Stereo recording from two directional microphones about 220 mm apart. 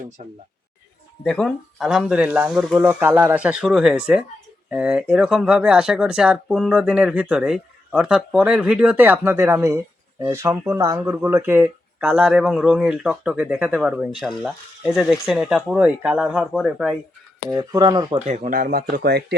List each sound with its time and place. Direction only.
1.2 s speech: 5° left (ahead or behind)
17.5 s speech: 15° right (ahead or behind)
18.3 s speech: 30° right (ahead or behind)